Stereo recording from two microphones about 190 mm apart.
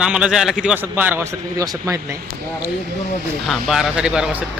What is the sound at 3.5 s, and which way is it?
Speech, centre (ahead or behind).